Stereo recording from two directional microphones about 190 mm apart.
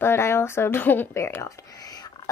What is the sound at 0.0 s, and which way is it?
A woman's voice, 15° left (ahead or behind).